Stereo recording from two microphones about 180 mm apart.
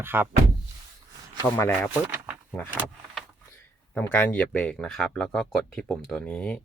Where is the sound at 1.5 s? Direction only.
10° left (ahead or behind).